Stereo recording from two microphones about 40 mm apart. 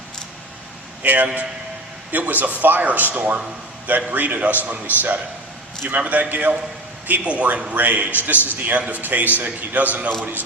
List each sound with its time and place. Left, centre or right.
1.0 s a man's voice: right